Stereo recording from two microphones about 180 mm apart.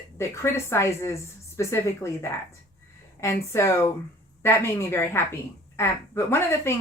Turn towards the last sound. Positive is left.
turn(degrees=15)  # may be behind; listen again after turning